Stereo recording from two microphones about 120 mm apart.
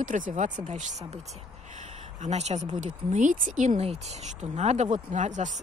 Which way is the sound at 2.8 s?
90° right.